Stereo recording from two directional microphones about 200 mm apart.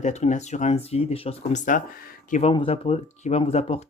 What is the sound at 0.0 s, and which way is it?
Speech, 35° left (ahead or behind).